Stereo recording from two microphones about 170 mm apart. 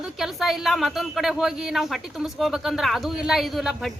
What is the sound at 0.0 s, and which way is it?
Speech, centre (ahead or behind).